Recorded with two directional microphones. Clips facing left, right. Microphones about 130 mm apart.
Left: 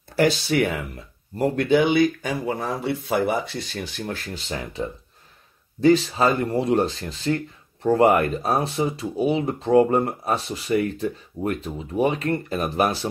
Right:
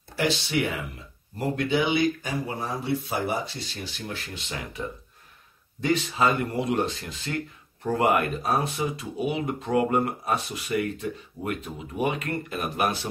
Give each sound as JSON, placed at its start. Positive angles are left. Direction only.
{"t": 0.1, "sound": "speech", "side_deg": 45}
{"t": 2.4, "sound": "speech", "side_deg": 75}
{"t": 5.8, "sound": "speech", "side_deg": 35}